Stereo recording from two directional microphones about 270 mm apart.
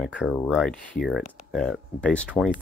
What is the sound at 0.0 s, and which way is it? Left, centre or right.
Speech, centre.